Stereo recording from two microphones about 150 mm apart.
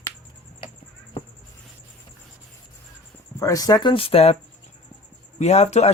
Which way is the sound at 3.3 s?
20° left (ahead or behind).